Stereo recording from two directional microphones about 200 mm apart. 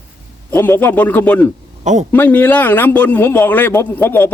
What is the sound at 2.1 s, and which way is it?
A man's voice, 10° left (ahead or behind).